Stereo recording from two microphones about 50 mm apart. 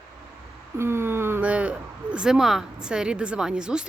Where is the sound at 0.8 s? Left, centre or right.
Right.